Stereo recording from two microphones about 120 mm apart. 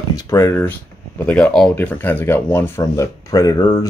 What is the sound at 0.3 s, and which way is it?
A man's voice, 25° left (ahead or behind).